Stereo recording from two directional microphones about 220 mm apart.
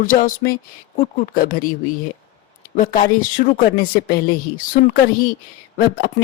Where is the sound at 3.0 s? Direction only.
35° left (ahead or behind).